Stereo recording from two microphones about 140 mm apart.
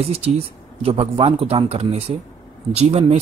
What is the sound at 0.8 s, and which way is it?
Speech, 45° right (ahead or behind).